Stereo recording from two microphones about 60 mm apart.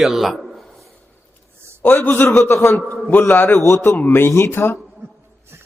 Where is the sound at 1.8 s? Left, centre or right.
Left.